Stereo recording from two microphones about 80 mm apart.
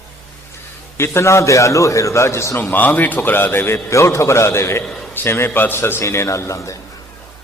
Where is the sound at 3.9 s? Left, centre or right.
Left.